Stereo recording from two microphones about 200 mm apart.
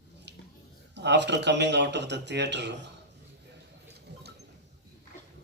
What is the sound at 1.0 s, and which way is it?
Speech, 60° right (ahead or behind).